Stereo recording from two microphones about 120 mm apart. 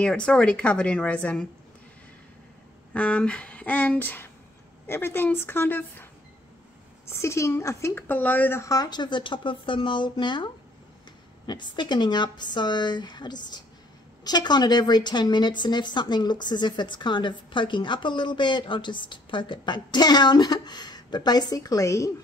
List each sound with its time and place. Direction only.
0.0 s a woman's voice: 5° left (ahead or behind)
2.9 s a woman's voice: 10° left (ahead or behind)
7.1 s a woman's voice: 25° left (ahead or behind)